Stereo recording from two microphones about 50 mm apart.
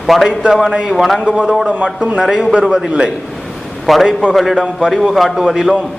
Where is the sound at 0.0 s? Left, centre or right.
Centre.